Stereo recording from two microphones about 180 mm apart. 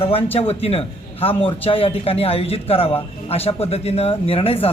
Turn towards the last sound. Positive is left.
turn(degrees=30)  # may be behind; listen again after turning